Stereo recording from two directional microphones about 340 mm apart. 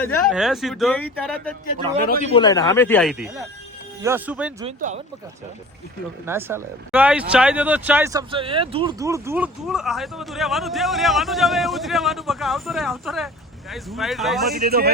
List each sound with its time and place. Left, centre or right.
0.3 s speech: centre
4.6 s speech: right
6.2 s speech: centre
14.5 s speech: right